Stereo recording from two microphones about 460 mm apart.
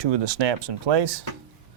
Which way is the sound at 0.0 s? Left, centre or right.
Right.